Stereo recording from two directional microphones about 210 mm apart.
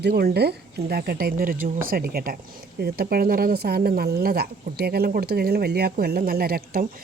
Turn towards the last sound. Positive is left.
turn(degrees=-45)  # may be behind; listen again after turning